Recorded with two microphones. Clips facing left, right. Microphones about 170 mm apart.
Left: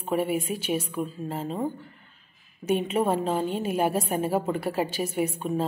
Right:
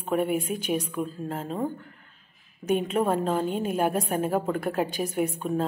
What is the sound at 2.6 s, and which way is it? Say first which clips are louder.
A woman's voice: even; 5° left (ahead or behind).